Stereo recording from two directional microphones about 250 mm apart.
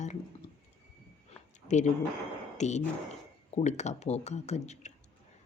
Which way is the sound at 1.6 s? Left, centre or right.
Left.